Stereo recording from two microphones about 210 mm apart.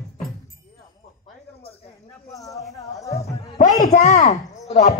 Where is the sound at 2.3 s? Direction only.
15° left (ahead or behind).